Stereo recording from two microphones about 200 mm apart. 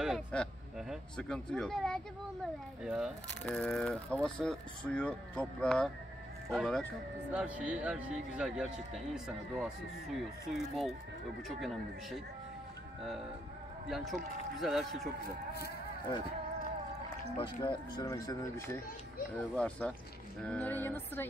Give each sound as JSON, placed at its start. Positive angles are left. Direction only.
{"t": 0.0, "sound": "speech", "side_deg": 0}
{"t": 13.8, "sound": "speech", "side_deg": 0}
{"t": 17.4, "sound": "speech", "side_deg": 25}
{"t": 19.5, "sound": "speech", "side_deg": 5}